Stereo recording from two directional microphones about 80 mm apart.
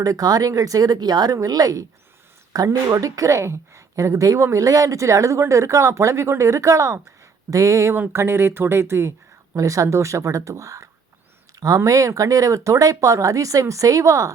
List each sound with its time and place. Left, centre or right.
0.0 s speech: right
7.9 s speech: right